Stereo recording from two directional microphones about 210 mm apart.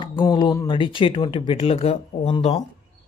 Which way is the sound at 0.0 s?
20° left (ahead or behind).